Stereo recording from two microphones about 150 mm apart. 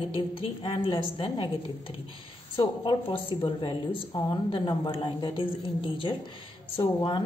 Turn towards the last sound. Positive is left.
turn(degrees=30)  # may be behind; listen again after turning